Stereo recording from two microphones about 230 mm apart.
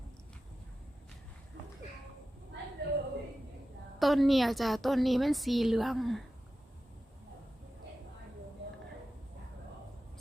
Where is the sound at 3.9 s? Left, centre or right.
Centre.